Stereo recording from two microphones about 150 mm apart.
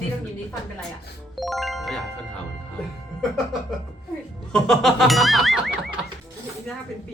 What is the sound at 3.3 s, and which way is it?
Speech, centre (ahead or behind).